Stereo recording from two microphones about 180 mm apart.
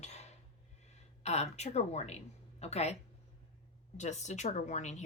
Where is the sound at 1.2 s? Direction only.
35° left (ahead or behind).